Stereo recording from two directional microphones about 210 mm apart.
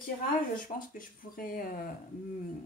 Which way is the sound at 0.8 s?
40° left (ahead or behind).